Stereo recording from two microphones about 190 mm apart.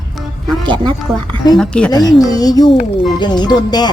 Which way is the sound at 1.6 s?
5° left (ahead or behind).